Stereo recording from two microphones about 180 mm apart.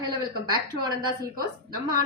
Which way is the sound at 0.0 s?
25° right (ahead or behind).